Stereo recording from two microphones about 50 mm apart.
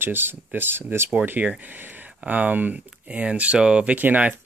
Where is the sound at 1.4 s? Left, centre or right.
Right.